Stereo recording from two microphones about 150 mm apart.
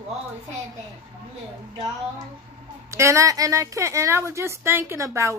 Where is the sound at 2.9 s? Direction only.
20° right (ahead or behind).